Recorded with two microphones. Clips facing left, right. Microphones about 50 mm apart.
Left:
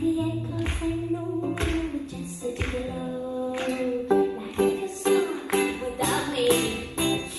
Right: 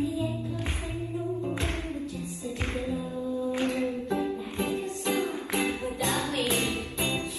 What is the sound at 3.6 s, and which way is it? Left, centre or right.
Music, left.